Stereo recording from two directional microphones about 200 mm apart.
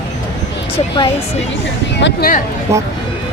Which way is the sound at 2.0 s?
55° left (ahead or behind).